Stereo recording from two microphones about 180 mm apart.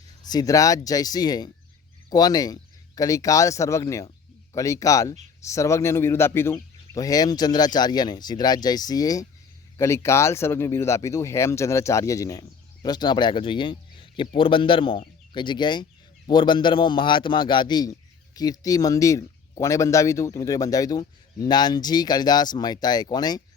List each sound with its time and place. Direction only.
0.2 s speech: 20° left (ahead or behind)